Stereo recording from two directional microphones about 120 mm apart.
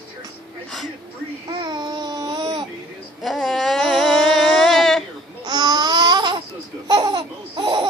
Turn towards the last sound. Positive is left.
turn(degrees=-40)  # may be behind; listen again after turning